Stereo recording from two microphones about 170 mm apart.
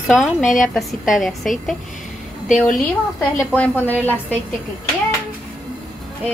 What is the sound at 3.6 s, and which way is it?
Speech, 10° left (ahead or behind).